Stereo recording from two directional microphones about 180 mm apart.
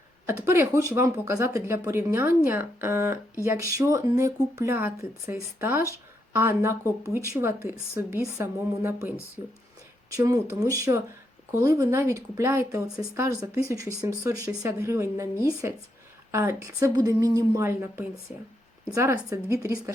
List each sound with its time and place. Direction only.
0.3 s speech: 15° right (ahead or behind)